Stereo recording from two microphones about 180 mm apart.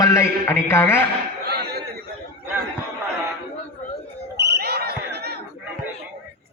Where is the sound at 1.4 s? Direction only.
65° right (ahead or behind).